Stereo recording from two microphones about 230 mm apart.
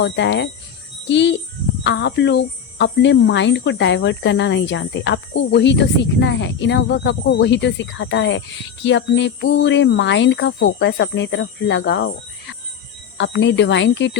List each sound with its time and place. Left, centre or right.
0.0 s speech: left